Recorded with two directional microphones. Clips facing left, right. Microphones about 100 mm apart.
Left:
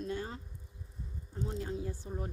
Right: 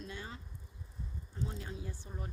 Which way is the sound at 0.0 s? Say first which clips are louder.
Left 7 dB; 45° left (ahead or behind).